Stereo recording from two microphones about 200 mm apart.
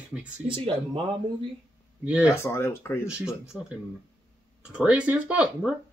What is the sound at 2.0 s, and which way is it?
Speech, 5° right (ahead or behind).